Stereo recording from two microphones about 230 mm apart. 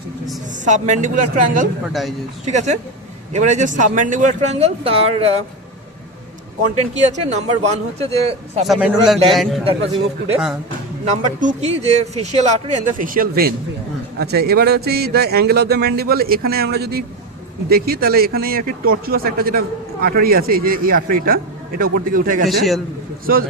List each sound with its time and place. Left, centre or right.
0.6 s speech: right
1.9 s a man's voice: centre
2.4 s speech: right
6.7 s a man's voice: right
8.6 s a man's voice: centre
11.0 s a man's voice: right
22.4 s a man's voice: centre